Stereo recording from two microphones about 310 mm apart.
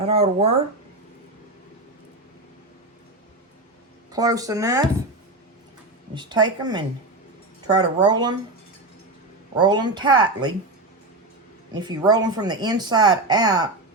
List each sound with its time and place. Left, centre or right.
0.0 s speech: centre
4.1 s speech: centre
6.1 s speech: centre
9.6 s speech: centre
11.7 s speech: centre